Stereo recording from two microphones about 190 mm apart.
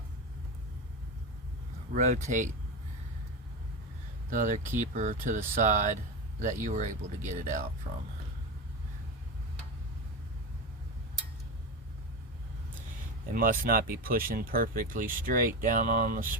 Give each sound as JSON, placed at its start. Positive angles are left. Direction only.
{"t": 1.9, "sound": "speech", "side_deg": -40}
{"t": 4.3, "sound": "speech", "side_deg": -40}
{"t": 13.3, "sound": "speech", "side_deg": -45}